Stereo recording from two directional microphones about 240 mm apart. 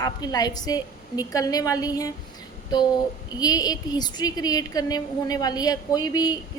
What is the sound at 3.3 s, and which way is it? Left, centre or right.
A woman's voice, centre.